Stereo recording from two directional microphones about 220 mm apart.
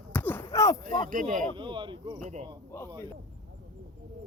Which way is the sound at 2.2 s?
30° right (ahead or behind).